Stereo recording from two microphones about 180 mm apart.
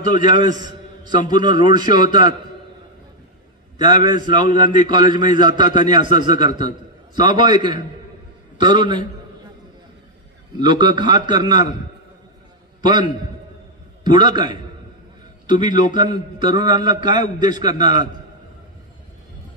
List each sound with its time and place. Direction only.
0.0 s a man's voice: 45° left (ahead or behind)
0.3 s a man's voice: 25° right (ahead or behind)
3.7 s a man's voice: 25° right (ahead or behind)
10.6 s a man's voice: 25° right (ahead or behind)
12.8 s a man's voice: 25° right (ahead or behind)